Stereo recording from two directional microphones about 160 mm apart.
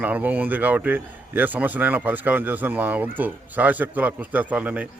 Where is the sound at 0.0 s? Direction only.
10° right (ahead or behind).